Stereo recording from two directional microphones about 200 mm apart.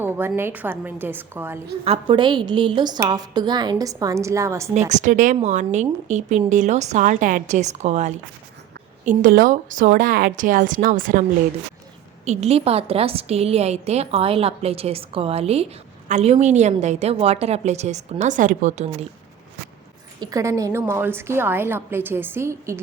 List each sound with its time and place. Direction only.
0.0 s a woman's voice: 10° right (ahead or behind)
1.8 s a woman's voice: 30° right (ahead or behind)
4.9 s a woman's voice: 40° right (ahead or behind)
12.2 s a woman's voice: 35° right (ahead or behind)
20.1 s a woman's voice: 20° right (ahead or behind)